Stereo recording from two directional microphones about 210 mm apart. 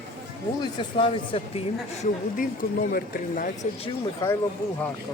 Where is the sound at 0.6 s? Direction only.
25° left (ahead or behind); by 3.7 s 40° left (ahead or behind).